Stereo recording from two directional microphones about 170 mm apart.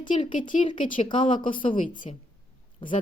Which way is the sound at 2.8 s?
30° left (ahead or behind).